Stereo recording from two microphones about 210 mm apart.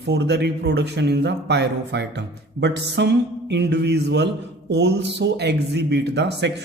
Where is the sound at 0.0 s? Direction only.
55° right (ahead or behind).